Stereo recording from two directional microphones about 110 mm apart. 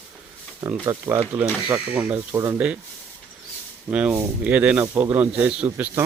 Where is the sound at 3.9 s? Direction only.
10° right (ahead or behind).